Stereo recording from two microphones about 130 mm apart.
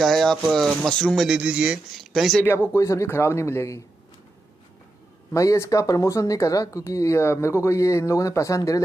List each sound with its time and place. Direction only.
0.0 s speech: centre (ahead or behind)
2.7 s speech: 20° left (ahead or behind)
5.3 s speech: 25° left (ahead or behind)